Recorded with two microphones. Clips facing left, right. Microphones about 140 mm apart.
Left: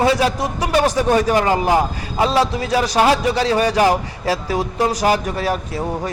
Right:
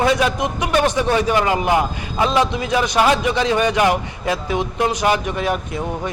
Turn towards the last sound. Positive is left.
turn(degrees=35)  # may be behind; listen again after turning